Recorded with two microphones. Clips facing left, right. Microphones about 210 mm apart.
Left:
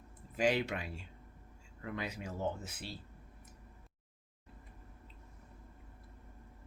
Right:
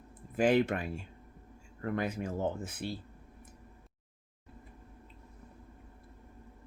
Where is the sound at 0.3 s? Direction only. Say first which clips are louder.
Right 6 dB; 50° right (ahead or behind).